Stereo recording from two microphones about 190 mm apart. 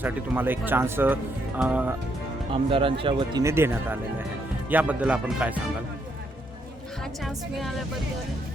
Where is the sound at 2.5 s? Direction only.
30° right (ahead or behind).